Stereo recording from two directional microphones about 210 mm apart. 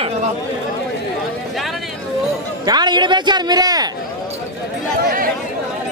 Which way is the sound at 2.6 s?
20° right (ahead or behind).